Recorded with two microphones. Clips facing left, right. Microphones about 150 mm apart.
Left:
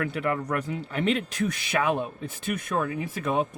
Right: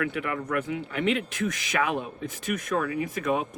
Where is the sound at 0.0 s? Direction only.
40° left (ahead or behind).